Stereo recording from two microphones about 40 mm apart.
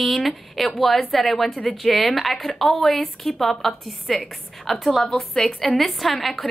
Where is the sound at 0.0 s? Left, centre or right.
Centre.